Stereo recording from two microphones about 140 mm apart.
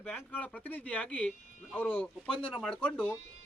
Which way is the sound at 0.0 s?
10° left (ahead or behind).